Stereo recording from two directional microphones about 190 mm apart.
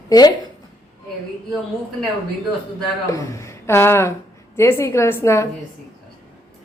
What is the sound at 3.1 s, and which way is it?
Speech, 15° left (ahead or behind).